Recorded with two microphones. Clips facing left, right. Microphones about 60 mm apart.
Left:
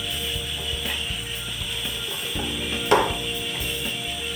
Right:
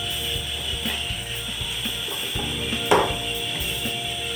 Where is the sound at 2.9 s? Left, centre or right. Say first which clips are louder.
Even; centre.